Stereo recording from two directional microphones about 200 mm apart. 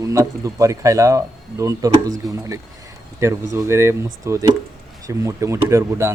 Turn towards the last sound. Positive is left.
turn(degrees=-15)  # may be behind; listen again after turning